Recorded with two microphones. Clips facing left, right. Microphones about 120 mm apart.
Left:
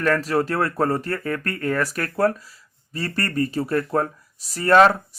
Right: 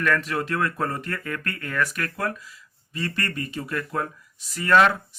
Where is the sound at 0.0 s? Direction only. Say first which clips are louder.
Left 4 dB; 35° left (ahead or behind).